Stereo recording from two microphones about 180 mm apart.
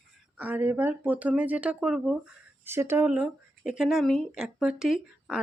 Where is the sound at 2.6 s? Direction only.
15° right (ahead or behind).